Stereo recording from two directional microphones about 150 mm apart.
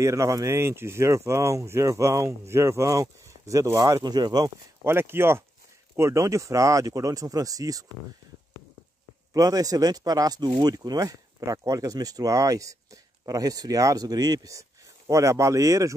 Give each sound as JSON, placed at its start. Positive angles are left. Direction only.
{"t": 0.0, "sound": "speech", "side_deg": -20}
{"t": 4.8, "sound": "speech", "side_deg": -15}
{"t": 9.3, "sound": "speech", "side_deg": -25}